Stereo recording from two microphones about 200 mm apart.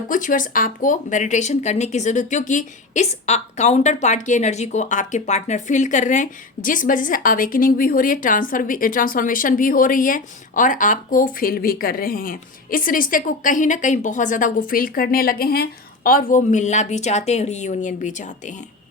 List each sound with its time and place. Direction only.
0.1 s speech: 40° left (ahead or behind)